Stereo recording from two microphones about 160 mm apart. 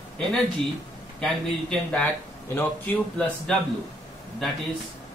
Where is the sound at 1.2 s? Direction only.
5° left (ahead or behind).